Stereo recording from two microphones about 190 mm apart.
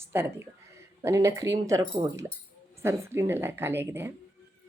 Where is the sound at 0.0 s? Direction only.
10° right (ahead or behind).